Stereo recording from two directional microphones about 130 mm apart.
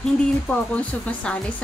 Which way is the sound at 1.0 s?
10° left (ahead or behind).